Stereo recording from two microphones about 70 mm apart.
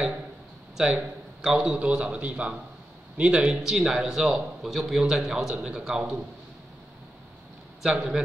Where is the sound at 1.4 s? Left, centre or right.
Centre.